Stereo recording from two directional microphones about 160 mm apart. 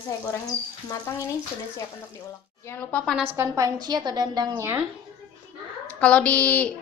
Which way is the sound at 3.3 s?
20° right (ahead or behind).